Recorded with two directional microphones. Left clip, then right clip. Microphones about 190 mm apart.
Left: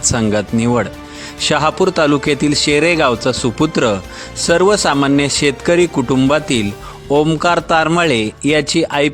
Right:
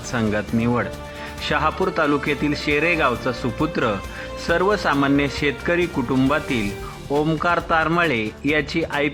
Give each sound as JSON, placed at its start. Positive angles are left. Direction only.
{"t": 0.1, "sound": "a man's voice", "side_deg": 45}
{"t": 7.1, "sound": "a man's voice", "side_deg": 40}